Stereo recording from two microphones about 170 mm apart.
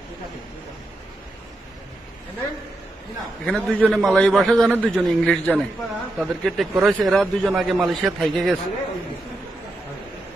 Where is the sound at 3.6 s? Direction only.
5° right (ahead or behind).